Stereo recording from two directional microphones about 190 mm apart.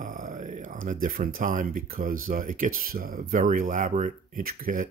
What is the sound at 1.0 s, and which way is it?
Speech, 50° right (ahead or behind).